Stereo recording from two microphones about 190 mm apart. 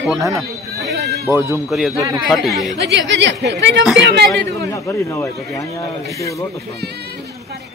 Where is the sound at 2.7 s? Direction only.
65° right (ahead or behind).